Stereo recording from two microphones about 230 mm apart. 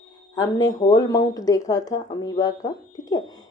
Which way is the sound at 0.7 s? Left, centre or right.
Centre.